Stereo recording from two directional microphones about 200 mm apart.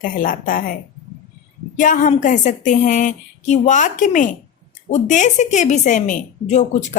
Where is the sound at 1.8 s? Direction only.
40° left (ahead or behind).